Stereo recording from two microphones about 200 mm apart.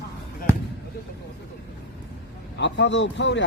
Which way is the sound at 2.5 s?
60° left (ahead or behind).